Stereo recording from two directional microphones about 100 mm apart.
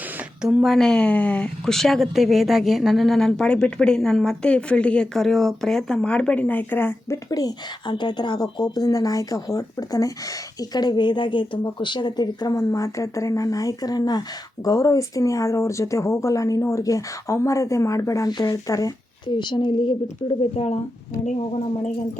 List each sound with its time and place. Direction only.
0.4 s speech: 5° right (ahead or behind); by 7.2 s 20° left (ahead or behind)
7.3 s a woman's voice: 40° left (ahead or behind)
18.3 s a woman's voice: 45° left (ahead or behind)
19.3 s a woman's voice: 50° left (ahead or behind)
20.4 s speech: 90° left